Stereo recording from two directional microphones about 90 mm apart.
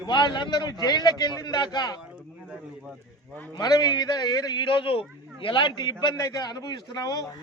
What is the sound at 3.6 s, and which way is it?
A man's voice, 45° left (ahead or behind).